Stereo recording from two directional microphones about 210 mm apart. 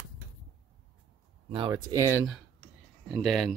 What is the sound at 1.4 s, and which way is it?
Speech, 25° right (ahead or behind).